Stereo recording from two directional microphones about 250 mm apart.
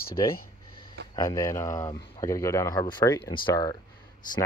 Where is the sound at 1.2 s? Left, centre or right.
Centre.